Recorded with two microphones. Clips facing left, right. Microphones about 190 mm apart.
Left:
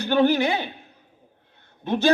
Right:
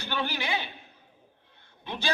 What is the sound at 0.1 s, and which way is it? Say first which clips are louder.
Speech: left 12 dB; 45° left (ahead or behind).